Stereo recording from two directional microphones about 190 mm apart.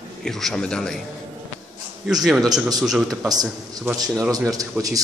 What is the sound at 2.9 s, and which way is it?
Speech, centre (ahead or behind).